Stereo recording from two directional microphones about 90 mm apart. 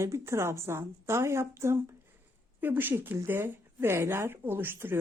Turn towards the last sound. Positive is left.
turn(degrees=-25)  # may be behind; listen again after turning